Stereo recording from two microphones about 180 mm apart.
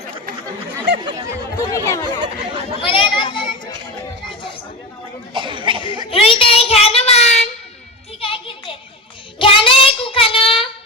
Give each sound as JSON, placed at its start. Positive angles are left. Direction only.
{"t": 1.5, "sound": "chatter", "side_deg": 15}
{"t": 2.8, "sound": "children playing", "side_deg": 25}
{"t": 5.3, "sound": "cough", "side_deg": -25}
{"t": 6.1, "sound": "child singing", "side_deg": 30}
{"t": 8.2, "sound": "music", "side_deg": 30}
{"t": 9.4, "sound": "child singing", "side_deg": 30}